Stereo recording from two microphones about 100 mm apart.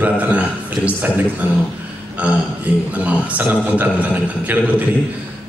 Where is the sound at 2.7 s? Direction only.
15° right (ahead or behind).